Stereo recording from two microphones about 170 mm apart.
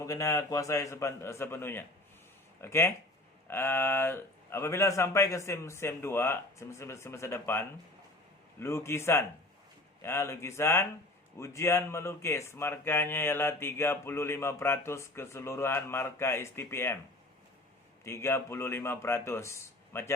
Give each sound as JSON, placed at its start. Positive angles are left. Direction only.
{"t": 0.0, "sound": "speech", "side_deg": 20}
{"t": 18.0, "sound": "speech", "side_deg": 15}